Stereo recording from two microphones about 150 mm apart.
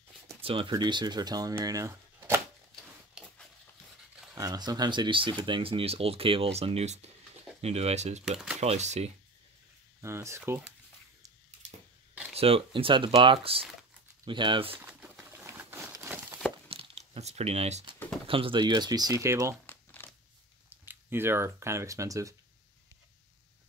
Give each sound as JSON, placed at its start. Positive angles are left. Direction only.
{"t": 0.4, "sound": "speech", "side_deg": -35}
{"t": 3.2, "sound": "a sound", "side_deg": -5}
{"t": 4.4, "sound": "speech", "side_deg": -25}
{"t": 8.3, "sound": "speech", "side_deg": -5}
{"t": 8.5, "sound": "speech", "side_deg": -50}
{"t": 10.0, "sound": "speech", "side_deg": -20}
{"t": 12.4, "sound": "speech", "side_deg": -40}
{"t": 14.8, "sound": "pigeon", "side_deg": -10}
{"t": 15.4, "sound": "a sound", "side_deg": -15}
{"t": 16.6, "sound": "crumpling", "side_deg": -35}
{"t": 18.2, "sound": "speech", "side_deg": -35}
{"t": 19.6, "sound": "crumpling", "side_deg": 15}
{"t": 20.7, "sound": "speech", "side_deg": -15}